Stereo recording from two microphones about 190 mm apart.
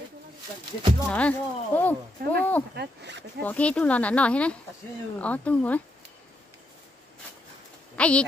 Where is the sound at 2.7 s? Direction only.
65° right (ahead or behind).